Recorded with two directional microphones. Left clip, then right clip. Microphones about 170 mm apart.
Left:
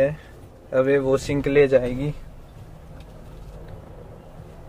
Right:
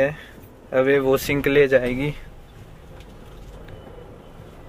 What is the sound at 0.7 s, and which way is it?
Speech, 5° left (ahead or behind).